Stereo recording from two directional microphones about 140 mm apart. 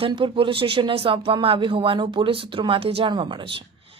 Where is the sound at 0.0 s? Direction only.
35° right (ahead or behind).